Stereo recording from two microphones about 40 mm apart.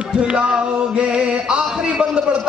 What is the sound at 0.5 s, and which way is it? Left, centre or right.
A man's voice, right.